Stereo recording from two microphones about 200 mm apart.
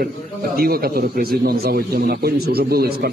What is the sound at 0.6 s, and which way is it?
A man's voice, 50° right (ahead or behind).